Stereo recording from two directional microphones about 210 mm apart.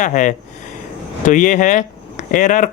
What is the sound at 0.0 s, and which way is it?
Speech, 35° left (ahead or behind).